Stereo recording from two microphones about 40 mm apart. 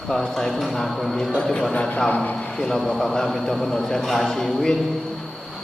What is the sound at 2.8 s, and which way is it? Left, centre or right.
A man's voice, centre.